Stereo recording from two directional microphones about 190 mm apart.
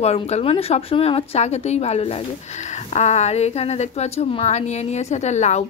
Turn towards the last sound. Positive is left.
turn(degrees=35)  # may be behind; listen again after turning